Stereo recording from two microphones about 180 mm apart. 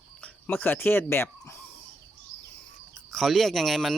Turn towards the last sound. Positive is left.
turn(degrees=0)  # may be behind; listen again after turning